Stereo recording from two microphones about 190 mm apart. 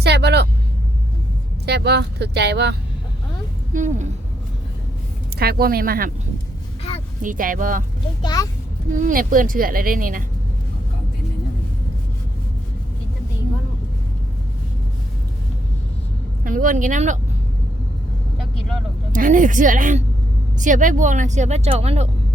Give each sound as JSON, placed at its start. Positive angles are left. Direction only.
{"t": 0.0, "sound": "vehicle", "side_deg": -60}
{"t": 1.6, "sound": "speech", "side_deg": -60}
{"t": 3.7, "sound": "speech", "side_deg": -40}
{"t": 5.4, "sound": "a woman's voice", "side_deg": -55}
{"t": 7.2, "sound": "a woman's voice", "side_deg": -45}
{"t": 8.2, "sound": "a child's voice", "side_deg": 20}
{"t": 8.9, "sound": "a woman's voice", "side_deg": -45}
{"t": 16.4, "sound": "a woman's voice", "side_deg": -45}
{"t": 19.1, "sound": "a woman's voice", "side_deg": -45}